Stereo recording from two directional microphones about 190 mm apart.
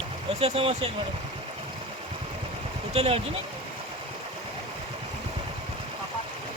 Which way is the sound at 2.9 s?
35° right (ahead or behind).